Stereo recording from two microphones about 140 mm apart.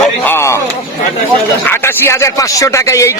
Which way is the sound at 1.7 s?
20° left (ahead or behind).